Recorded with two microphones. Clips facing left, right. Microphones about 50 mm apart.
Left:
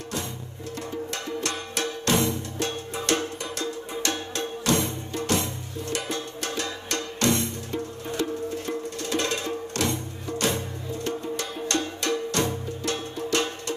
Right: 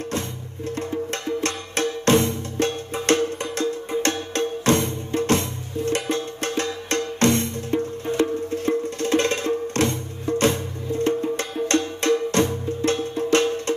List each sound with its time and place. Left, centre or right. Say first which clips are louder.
0.7 s music: right 6 dB; right